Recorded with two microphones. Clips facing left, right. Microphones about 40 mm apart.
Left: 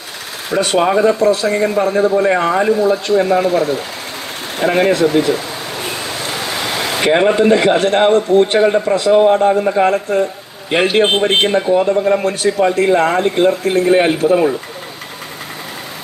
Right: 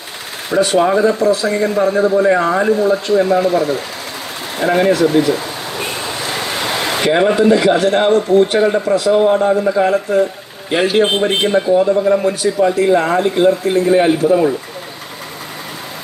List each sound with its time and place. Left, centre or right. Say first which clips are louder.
0.6 s a man's voice: even; left
7.0 s a man's voice: left 1 dB; left